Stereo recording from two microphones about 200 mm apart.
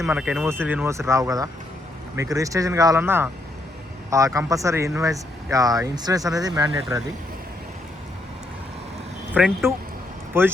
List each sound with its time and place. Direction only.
0.0 s speech: 5° right (ahead or behind)
9.3 s speech: 5° right (ahead or behind)